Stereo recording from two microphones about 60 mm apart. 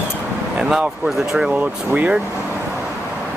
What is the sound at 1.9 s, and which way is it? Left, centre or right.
Speech, centre.